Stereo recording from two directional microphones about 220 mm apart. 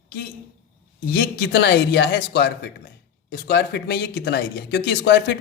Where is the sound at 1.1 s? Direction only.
50° left (ahead or behind).